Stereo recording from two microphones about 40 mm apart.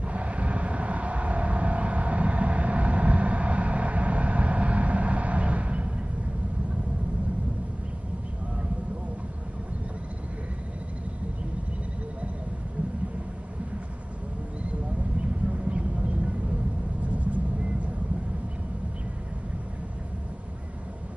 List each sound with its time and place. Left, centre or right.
0.0 s vehicle: right
15.5 s a sound: right
17.1 s vehicle: right